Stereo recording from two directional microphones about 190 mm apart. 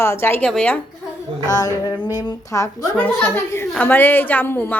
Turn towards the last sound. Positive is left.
turn(degrees=10)  # may be behind; listen again after turning